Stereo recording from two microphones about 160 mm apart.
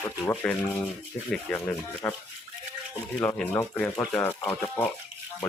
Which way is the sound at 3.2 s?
5° left (ahead or behind).